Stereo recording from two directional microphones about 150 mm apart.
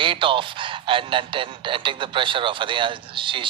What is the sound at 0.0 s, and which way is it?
Speech, 35° right (ahead or behind).